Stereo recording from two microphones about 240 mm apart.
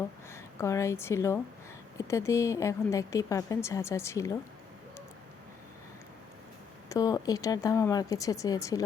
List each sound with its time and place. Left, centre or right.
0.3 s a woman's voice: centre
6.8 s a woman's voice: centre